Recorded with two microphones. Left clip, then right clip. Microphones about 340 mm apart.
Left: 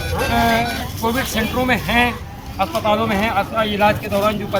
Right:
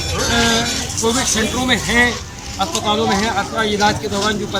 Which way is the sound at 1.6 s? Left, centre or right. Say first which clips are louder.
Right 2 dB; centre.